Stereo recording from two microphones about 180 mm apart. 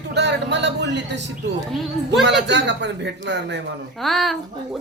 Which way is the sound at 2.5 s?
75° right (ahead or behind).